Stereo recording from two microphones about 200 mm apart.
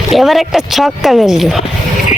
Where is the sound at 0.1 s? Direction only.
Centre (ahead or behind).